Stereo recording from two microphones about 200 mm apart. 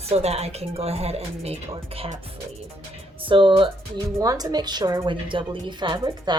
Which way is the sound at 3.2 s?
25° right (ahead or behind).